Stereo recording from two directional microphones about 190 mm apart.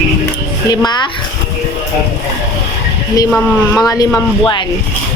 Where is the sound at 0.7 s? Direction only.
20° left (ahead or behind).